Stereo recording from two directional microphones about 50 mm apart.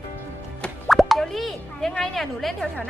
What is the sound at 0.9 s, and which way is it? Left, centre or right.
Plop, centre.